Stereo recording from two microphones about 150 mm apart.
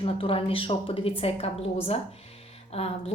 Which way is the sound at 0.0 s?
40° left (ahead or behind).